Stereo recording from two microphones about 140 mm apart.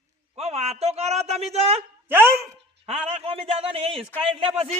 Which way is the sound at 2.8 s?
50° right (ahead or behind).